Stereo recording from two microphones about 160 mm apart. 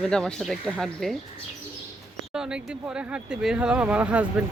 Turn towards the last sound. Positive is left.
turn(degrees=-10)  # may be behind; listen again after turning